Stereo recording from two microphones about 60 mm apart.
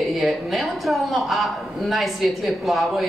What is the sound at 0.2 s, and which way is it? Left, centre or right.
A woman's voice, centre.